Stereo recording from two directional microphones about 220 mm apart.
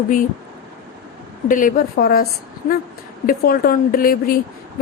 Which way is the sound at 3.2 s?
40° left (ahead or behind).